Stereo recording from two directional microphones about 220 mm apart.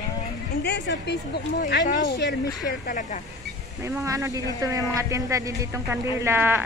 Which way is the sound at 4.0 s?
15° right (ahead or behind).